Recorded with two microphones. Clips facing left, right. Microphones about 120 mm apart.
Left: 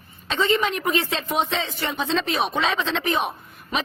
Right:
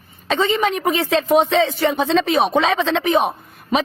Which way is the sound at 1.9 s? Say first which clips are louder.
Right 5 dB; 50° right (ahead or behind).